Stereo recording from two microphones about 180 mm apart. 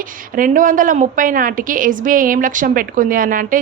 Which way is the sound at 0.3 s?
45° right (ahead or behind).